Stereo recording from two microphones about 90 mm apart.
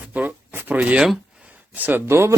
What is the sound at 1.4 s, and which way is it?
Speech, 15° right (ahead or behind).